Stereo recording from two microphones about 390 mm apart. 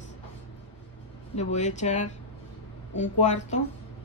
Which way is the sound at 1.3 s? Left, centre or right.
Centre.